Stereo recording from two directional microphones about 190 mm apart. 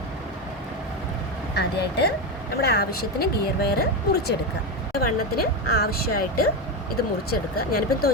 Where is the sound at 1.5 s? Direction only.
60° left (ahead or behind).